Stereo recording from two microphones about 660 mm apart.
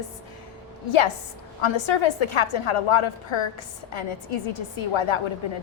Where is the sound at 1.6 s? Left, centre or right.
Left.